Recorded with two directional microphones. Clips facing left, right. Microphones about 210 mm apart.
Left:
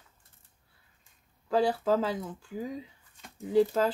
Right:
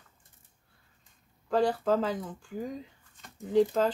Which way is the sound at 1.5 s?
5° left (ahead or behind).